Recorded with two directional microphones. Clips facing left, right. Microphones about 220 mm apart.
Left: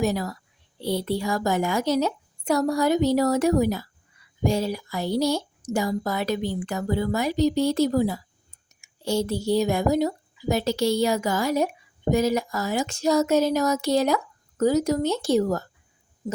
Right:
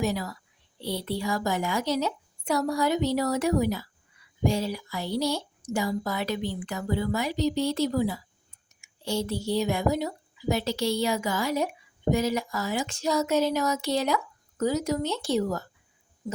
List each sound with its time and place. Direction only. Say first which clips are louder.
0.0 s a child's voice: left 4 dB; 45° left (ahead or behind)